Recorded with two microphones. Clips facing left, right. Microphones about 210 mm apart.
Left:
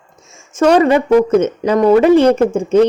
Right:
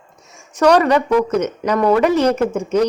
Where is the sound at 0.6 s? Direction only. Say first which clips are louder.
Left 3 dB; 25° left (ahead or behind).